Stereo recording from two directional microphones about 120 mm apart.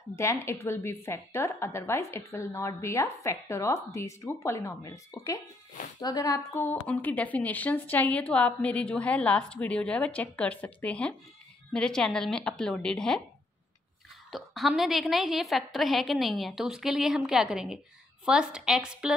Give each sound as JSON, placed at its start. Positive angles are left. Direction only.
{"t": 0.1, "sound": "a woman's voice", "side_deg": 20}
{"t": 6.5, "sound": "a woman's voice", "side_deg": 15}
{"t": 14.3, "sound": "a woman's voice", "side_deg": 0}